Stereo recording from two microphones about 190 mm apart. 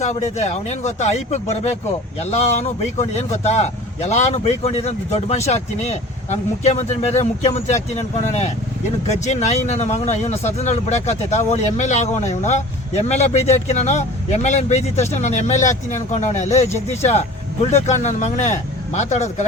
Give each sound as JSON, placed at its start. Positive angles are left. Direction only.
{"t": 0.0, "sound": "speech", "side_deg": 35}
{"t": 9.0, "sound": "speech", "side_deg": 35}
{"t": 16.6, "sound": "speech", "side_deg": 15}
{"t": 17.0, "sound": "speech", "side_deg": 35}